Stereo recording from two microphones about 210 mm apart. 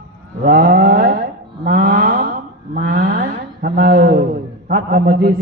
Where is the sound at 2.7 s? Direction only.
40° right (ahead or behind).